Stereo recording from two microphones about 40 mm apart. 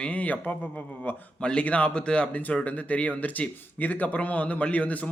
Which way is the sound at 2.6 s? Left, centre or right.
Left.